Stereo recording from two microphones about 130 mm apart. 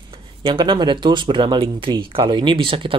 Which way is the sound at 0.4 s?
40° right (ahead or behind).